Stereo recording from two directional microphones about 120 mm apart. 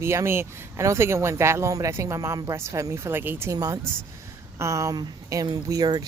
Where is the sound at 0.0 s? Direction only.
20° right (ahead or behind).